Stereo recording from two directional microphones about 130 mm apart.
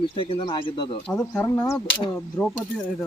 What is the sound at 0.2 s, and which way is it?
Speech, 40° left (ahead or behind).